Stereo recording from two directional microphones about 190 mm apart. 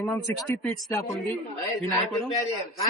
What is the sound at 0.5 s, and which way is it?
Speech, 15° left (ahead or behind).